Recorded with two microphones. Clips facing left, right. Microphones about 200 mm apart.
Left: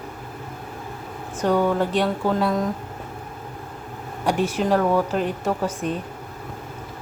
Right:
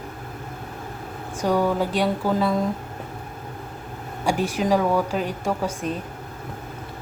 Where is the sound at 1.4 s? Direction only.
10° right (ahead or behind).